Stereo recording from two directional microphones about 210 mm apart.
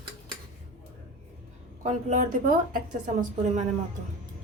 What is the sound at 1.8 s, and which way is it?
A woman's voice, 35° right (ahead or behind).